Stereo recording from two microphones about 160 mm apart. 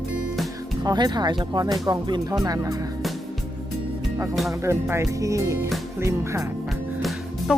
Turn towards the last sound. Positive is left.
turn(degrees=-5)  # may be behind; listen again after turning